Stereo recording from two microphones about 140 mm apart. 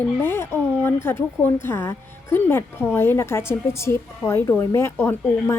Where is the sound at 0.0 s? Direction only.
15° left (ahead or behind).